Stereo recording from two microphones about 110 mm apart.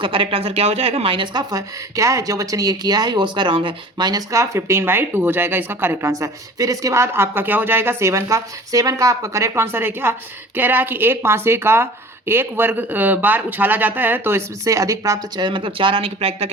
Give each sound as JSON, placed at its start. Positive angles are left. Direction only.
{"t": 0.0, "sound": "a woman's voice", "side_deg": -50}